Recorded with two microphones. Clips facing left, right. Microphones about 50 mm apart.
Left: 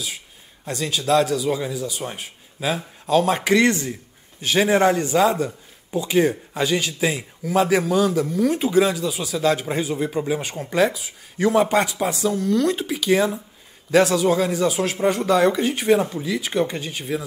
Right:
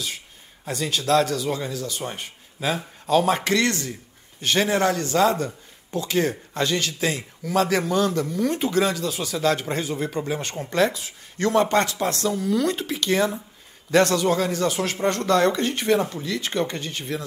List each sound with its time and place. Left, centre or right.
0.7 s a man's voice: centre
3.4 s speech: centre
4.4 s speech: centre
4.6 s a man's voice: left